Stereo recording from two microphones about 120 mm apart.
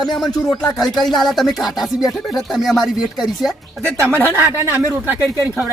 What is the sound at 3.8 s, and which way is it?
A woman's voice, 25° right (ahead or behind).